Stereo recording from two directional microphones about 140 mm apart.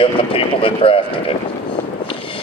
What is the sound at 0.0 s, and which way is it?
Speech, 40° left (ahead or behind).